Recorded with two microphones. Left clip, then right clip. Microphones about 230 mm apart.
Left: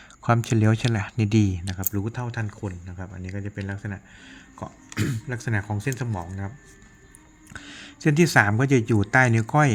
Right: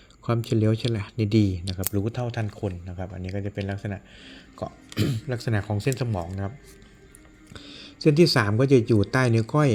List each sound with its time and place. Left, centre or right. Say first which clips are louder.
0.2 s speech: left 3 dB; left; by 6.5 s centre
7.5 s speech: left 3 dB; centre